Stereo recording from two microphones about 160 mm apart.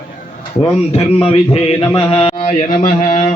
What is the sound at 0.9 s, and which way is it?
Speech, 40° left (ahead or behind).